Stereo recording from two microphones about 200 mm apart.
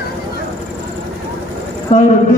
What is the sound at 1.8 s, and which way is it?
Speech, 35° left (ahead or behind).